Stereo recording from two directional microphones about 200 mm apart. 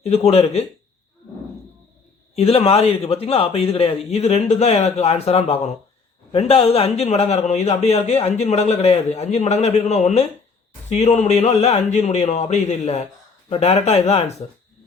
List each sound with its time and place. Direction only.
0.0 s a man's voice: 30° left (ahead or behind)
2.3 s a man's voice: 30° left (ahead or behind)